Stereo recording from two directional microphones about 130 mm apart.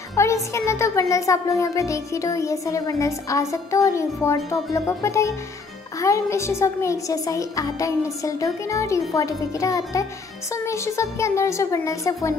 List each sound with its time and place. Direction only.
0.1 s music: 20° left (ahead or behind)